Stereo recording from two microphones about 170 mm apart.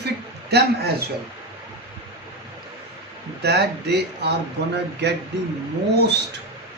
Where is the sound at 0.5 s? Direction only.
70° right (ahead or behind).